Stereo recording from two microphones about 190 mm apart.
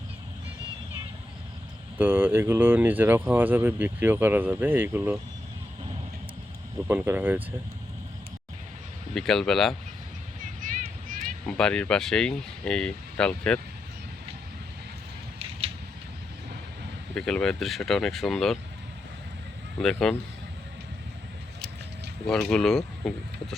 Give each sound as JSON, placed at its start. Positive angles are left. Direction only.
{"t": 2.0, "sound": "speech", "side_deg": -10}
{"t": 6.8, "sound": "speech", "side_deg": -10}
{"t": 9.1, "sound": "speech", "side_deg": 0}
{"t": 10.4, "sound": "a sound", "side_deg": -45}
{"t": 11.2, "sound": "speech", "side_deg": 5}
{"t": 17.2, "sound": "speech", "side_deg": 5}
{"t": 19.8, "sound": "speech", "side_deg": 5}
{"t": 22.3, "sound": "speech", "side_deg": 5}